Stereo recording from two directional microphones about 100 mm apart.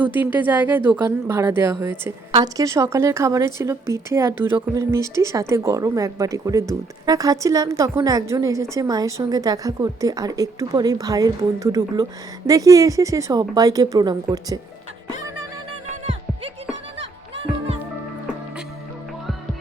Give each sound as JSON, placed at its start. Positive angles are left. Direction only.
{"t": 0.0, "sound": "a woman's voice", "side_deg": -20}
{"t": 2.3, "sound": "a woman's voice", "side_deg": -40}